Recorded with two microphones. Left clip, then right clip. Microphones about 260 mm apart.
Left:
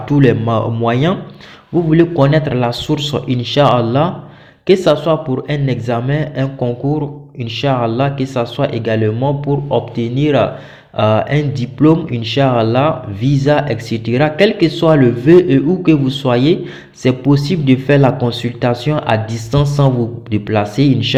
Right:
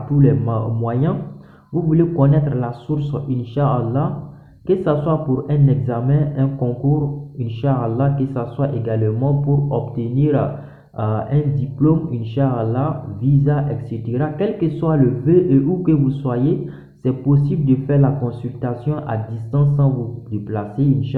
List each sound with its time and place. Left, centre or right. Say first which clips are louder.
0.2 s speech: left 6 dB; left
12.4 s speech: left 8 dB; left